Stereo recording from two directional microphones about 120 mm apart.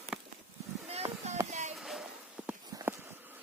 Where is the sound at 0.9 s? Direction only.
60° right (ahead or behind).